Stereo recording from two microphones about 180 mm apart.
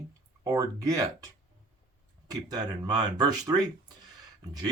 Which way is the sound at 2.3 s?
20° right (ahead or behind).